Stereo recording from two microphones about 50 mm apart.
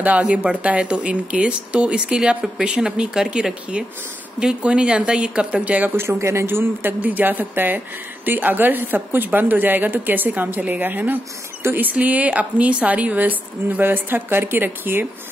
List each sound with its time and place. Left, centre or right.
0.0 s a woman's voice: right
6.1 s speech: right
7.0 s a woman's voice: right